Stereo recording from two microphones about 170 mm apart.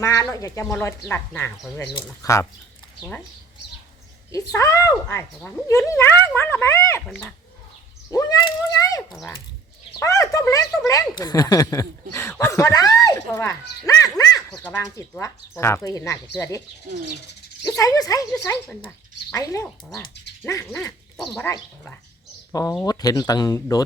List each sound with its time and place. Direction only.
0.0 s speech: 20° left (ahead or behind)
1.9 s speech: 20° left (ahead or behind)
4.3 s speech: 20° left (ahead or behind)
8.1 s speech: 20° left (ahead or behind)
17.6 s speech: 20° left (ahead or behind)